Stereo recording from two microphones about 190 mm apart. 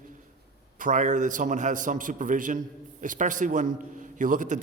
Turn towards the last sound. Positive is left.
turn(degrees=-40)  # may be behind; listen again after turning